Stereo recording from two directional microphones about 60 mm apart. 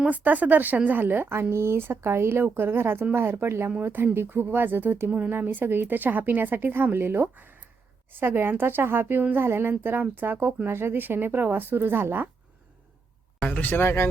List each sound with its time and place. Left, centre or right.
0.0 s speech: right
13.4 s speech: left